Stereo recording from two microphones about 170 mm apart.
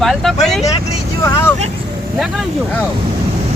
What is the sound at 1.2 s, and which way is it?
Speech, 15° left (ahead or behind).